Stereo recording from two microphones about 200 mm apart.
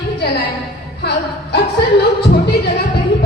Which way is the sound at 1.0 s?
55° left (ahead or behind).